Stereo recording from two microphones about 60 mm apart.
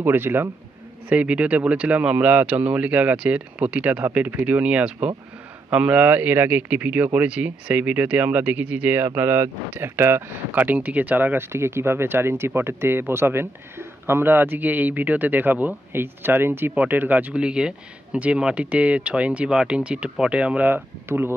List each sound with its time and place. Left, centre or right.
0.0 s speech: right
1.0 s a man's voice: right
11.3 s speech: right
17.4 s a man's voice: centre
21.1 s speech: right